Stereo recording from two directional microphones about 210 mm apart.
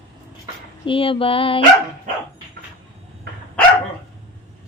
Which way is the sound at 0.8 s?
25° left (ahead or behind).